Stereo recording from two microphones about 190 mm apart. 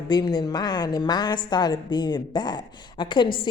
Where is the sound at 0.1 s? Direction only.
20° left (ahead or behind).